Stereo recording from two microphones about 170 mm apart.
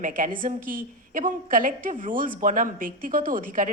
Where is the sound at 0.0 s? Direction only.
50° right (ahead or behind).